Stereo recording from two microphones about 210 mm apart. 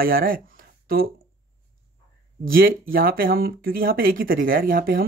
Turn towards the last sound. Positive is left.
turn(degrees=-45)  # may be behind; listen again after turning